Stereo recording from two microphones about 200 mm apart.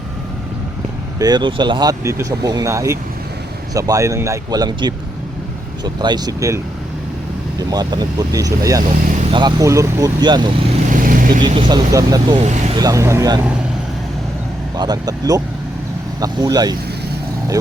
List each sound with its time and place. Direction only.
1.2 s a man's voice: 20° right (ahead or behind)
7.7 s a man's voice: 20° right (ahead or behind)
10.9 s vehicle: 45° right (ahead or behind)
11.4 s speech: 20° right (ahead or behind)
12.4 s speech: 30° right (ahead or behind)
12.8 s a man's voice: 15° right (ahead or behind)
14.8 s speech: 20° right (ahead or behind)